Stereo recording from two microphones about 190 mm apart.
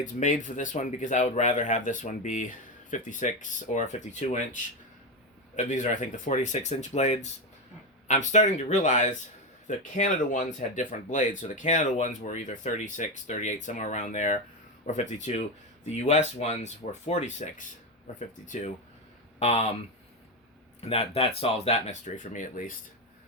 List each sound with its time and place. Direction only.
0.0 s speech: 40° left (ahead or behind)
19.4 s speech: 35° left (ahead or behind)
20.8 s speech: 30° left (ahead or behind)